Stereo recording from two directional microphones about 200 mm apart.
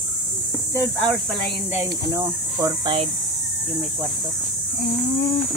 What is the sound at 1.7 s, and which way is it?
Speech, 15° right (ahead or behind).